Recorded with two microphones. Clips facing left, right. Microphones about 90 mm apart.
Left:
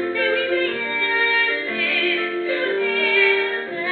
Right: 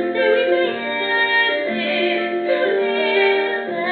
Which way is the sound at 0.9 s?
25° right (ahead or behind).